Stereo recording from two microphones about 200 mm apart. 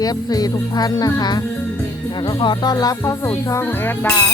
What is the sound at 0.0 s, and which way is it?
Speech, 20° left (ahead or behind).